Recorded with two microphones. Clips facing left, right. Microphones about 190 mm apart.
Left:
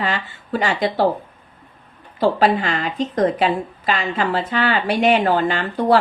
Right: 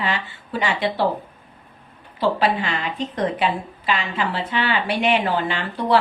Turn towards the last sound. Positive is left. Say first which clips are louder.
# left 3 dB
turn(degrees=45)  # may be behind; listen again after turning